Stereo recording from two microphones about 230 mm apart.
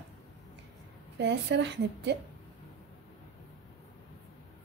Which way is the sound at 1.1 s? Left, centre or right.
Right.